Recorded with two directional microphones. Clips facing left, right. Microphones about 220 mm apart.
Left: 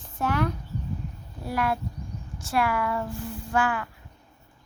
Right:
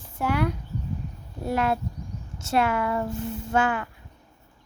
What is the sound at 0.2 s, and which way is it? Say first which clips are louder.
Speech: right 1 dB; 10° right (ahead or behind).